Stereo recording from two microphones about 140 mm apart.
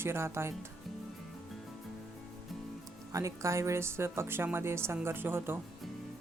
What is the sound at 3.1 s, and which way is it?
A woman's voice, 25° right (ahead or behind).